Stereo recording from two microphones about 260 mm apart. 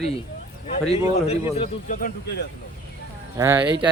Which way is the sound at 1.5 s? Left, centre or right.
Left.